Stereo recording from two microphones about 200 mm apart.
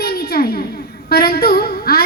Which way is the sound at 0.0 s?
50° left (ahead or behind).